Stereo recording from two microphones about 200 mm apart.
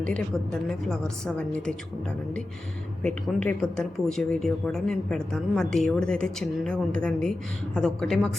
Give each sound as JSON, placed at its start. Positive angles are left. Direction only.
{"t": 0.0, "sound": "a woman's voice", "side_deg": 5}
{"t": 3.4, "sound": "a woman's voice", "side_deg": 5}